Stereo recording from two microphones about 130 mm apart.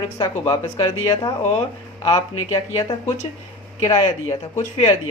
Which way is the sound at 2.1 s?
45° left (ahead or behind).